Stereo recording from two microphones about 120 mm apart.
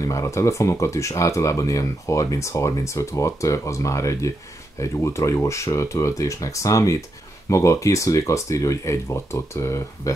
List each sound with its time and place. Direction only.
0.0 s speech: 25° left (ahead or behind)